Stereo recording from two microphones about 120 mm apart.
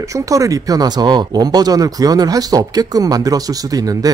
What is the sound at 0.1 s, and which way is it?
Speech, 30° right (ahead or behind).